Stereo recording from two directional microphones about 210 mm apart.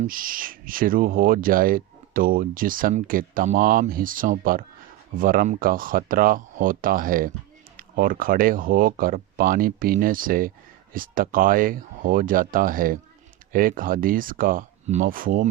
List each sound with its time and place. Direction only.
0.0 s speech: 40° right (ahead or behind)